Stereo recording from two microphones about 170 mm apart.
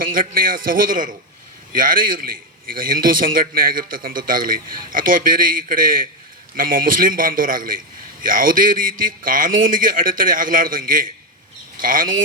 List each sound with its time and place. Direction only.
0.0 s a man's voice: 55° right (ahead or behind)